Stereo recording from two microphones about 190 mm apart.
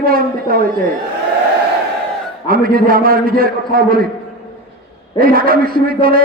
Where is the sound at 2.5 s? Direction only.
50° right (ahead or behind).